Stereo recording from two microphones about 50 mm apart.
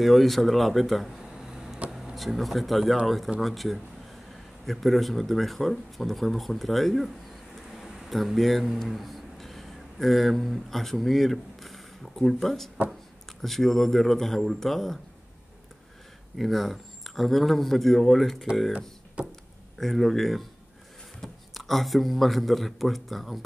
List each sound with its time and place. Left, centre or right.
0.0 s speech: centre
7.7 s a sound: centre
8.4 s a man's voice: centre
16.3 s speech: centre
18.7 s speech: centre
19.8 s speech: centre